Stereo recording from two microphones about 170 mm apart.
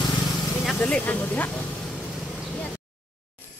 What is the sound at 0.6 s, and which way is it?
Speech, 5° left (ahead or behind).